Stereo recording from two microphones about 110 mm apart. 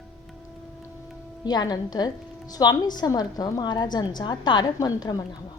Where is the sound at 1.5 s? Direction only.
40° left (ahead or behind).